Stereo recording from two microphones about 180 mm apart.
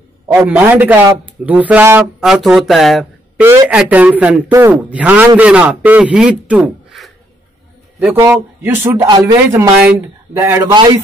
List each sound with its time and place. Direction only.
0.5 s a man's voice: 10° right (ahead or behind)
8.3 s speech: 15° right (ahead or behind)